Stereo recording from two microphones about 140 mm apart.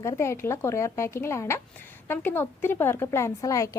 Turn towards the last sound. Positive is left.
turn(degrees=25)  # may be behind; listen again after turning